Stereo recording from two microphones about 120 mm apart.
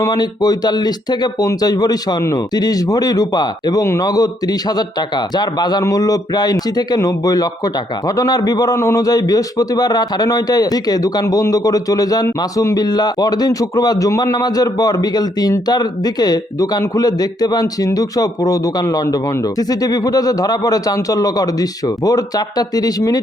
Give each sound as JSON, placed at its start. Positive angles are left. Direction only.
{"t": 0.0, "sound": "a man's voice", "side_deg": 35}